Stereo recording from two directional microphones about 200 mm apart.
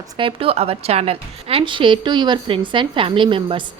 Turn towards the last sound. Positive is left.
turn(degrees=-25)  # may be behind; listen again after turning